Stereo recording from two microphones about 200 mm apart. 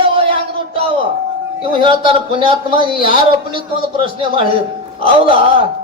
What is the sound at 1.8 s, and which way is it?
Speech, 25° right (ahead or behind).